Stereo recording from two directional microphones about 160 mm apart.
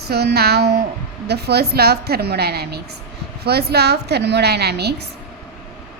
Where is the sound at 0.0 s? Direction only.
90° right.